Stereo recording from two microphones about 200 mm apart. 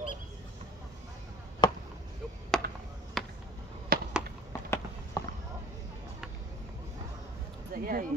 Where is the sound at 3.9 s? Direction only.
50° right (ahead or behind).